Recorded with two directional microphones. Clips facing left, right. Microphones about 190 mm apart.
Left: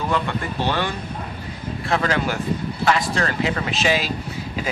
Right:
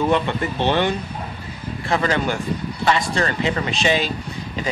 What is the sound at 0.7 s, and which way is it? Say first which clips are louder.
Speech: right 5 dB; 20° right (ahead or behind).